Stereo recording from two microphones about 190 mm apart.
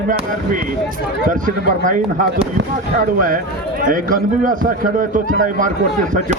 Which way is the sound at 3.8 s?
45° right (ahead or behind).